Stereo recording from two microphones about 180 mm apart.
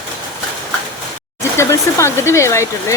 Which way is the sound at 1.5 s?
15° left (ahead or behind).